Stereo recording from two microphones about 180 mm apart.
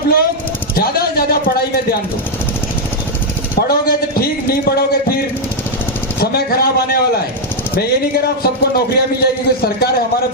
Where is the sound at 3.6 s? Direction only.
55° left (ahead or behind).